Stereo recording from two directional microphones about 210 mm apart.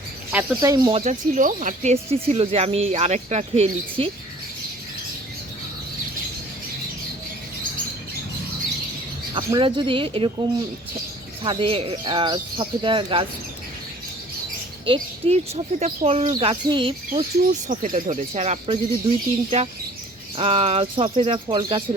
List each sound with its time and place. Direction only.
0.3 s speech: 10° right (ahead or behind); by 4.1 s 30° right (ahead or behind)
9.3 s speech: 25° right (ahead or behind)
11.4 s speech: 25° right (ahead or behind)
14.8 s speech: 25° right (ahead or behind)